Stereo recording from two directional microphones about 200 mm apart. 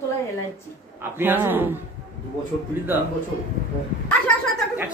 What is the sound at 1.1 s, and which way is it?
Speech, 10° right (ahead or behind).